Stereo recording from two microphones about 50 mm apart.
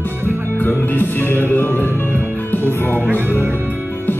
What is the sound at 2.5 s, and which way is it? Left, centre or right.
Music, left.